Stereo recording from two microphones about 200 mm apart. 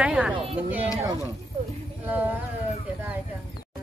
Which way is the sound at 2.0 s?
10° right (ahead or behind).